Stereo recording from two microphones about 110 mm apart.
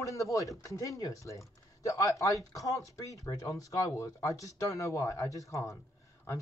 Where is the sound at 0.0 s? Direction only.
30° left (ahead or behind).